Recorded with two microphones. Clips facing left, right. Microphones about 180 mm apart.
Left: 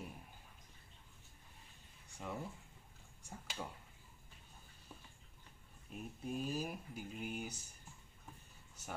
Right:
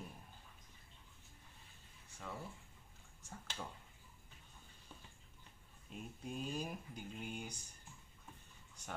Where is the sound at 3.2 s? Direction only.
10° left (ahead or behind).